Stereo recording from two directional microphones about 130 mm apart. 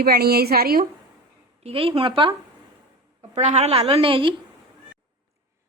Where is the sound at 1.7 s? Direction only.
45° right (ahead or behind).